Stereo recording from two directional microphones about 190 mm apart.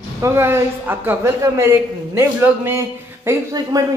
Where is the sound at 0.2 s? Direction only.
15° right (ahead or behind).